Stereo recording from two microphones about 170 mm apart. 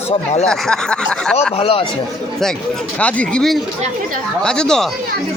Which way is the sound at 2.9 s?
5° left (ahead or behind).